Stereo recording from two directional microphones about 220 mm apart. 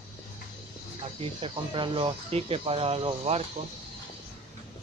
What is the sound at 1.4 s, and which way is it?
Speech, 25° right (ahead or behind).